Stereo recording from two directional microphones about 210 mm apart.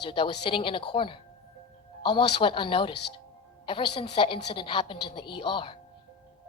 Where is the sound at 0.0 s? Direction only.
25° left (ahead or behind).